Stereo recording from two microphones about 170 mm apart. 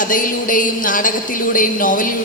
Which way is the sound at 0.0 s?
55° left (ahead or behind).